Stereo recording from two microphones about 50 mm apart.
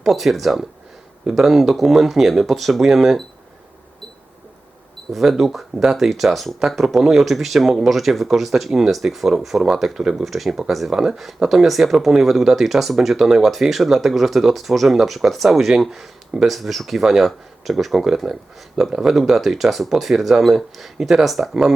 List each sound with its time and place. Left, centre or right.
0.0 s speech: centre
5.1 s speech: centre
10.0 s speech: centre
10.2 s speech: centre